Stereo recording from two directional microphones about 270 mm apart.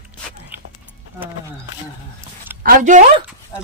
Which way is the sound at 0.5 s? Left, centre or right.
Centre.